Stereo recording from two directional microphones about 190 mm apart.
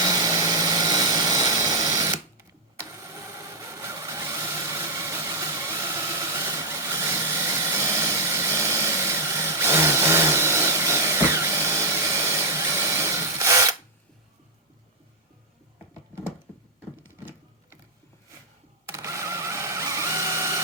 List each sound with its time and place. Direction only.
0.0 s helicopter: 20° right (ahead or behind)
3.8 s vehicle: 15° right (ahead or behind)
5.0 s engine: 15° right (ahead or behind)
7.9 s vehicle: 15° right (ahead or behind)
17.0 s sewing machine: 10° right (ahead or behind)
18.9 s a sound: 15° right (ahead or behind)